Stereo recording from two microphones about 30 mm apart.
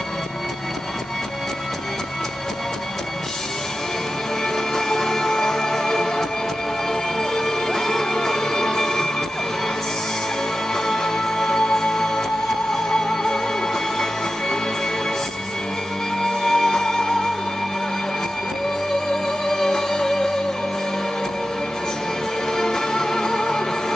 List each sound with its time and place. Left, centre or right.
4.7 s music: centre
7.3 s music: centre
10.9 s music: centre
16.2 s music: centre
19.4 s music: centre
22.6 s music: centre